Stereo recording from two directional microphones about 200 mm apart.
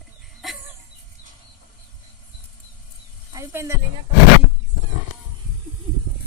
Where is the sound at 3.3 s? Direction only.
15° right (ahead or behind).